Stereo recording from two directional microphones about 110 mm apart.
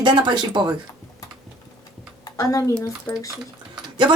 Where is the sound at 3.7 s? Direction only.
45° right (ahead or behind).